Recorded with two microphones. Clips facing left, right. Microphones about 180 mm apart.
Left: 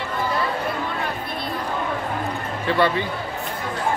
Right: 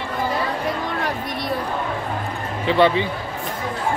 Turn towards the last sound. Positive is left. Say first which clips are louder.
# right 3 dB
turn(degrees=-20)  # may be behind; listen again after turning